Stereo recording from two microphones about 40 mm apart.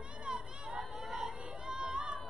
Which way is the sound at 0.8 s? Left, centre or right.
Centre.